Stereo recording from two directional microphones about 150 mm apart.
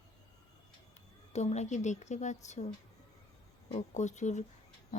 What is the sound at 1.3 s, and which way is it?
Speech, 50° left (ahead or behind).